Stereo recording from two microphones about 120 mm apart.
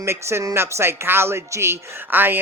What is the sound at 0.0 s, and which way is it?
Speech, 20° right (ahead or behind).